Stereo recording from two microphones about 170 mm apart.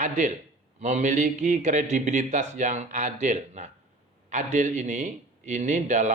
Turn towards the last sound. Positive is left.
turn(degrees=-45)  # may be behind; listen again after turning